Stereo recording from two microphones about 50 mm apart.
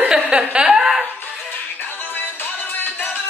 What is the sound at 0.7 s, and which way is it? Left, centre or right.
Laughter, centre.